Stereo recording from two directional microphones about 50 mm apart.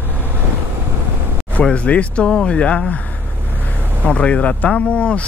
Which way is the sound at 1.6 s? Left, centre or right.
Left.